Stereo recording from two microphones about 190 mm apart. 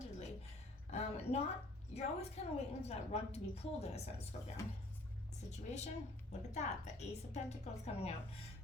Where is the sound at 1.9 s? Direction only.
35° left (ahead or behind).